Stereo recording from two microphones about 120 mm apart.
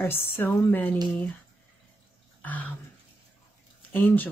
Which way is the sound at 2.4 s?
15° left (ahead or behind).